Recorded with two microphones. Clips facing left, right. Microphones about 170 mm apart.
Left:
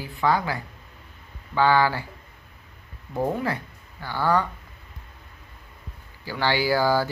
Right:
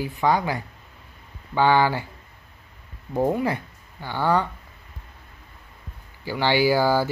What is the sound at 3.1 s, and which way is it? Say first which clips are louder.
Speech: right 3 dB; 20° right (ahead or behind).